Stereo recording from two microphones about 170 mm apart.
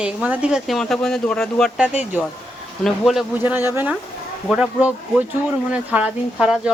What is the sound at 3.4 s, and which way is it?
Speech, 10° right (ahead or behind).